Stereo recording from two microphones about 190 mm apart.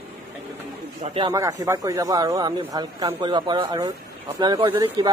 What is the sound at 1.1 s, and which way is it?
Speech, 25° right (ahead or behind).